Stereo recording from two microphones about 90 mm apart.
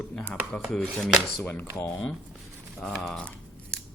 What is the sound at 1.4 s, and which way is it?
Speech, 20° left (ahead or behind).